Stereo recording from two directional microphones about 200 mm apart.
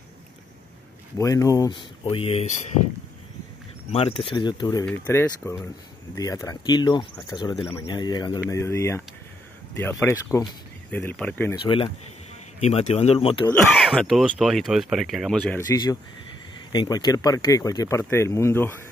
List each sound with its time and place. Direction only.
1.1 s speech: 15° left (ahead or behind)
3.9 s speech: 30° left (ahead or behind)
4.8 s speech: 10° left (ahead or behind)
11.6 s speech: 25° left (ahead or behind)
13.7 s speech: centre (ahead or behind)
15.5 s speech: 15° left (ahead or behind)